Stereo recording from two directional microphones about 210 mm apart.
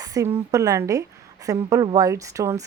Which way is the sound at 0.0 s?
15° right (ahead or behind).